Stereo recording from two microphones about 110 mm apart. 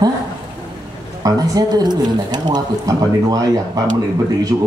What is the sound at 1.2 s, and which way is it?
Speech, 35° right (ahead or behind).